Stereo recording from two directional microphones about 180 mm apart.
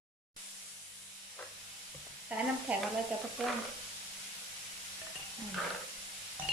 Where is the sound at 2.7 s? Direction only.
5° right (ahead or behind).